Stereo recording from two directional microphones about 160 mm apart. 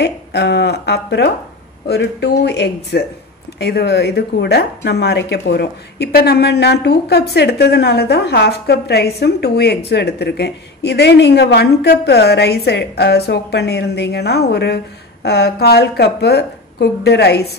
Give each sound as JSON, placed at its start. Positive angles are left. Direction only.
{"t": 0.0, "sound": "speech", "side_deg": 90}